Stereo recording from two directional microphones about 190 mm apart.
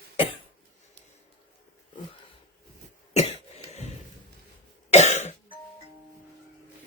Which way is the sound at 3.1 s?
35° left (ahead or behind).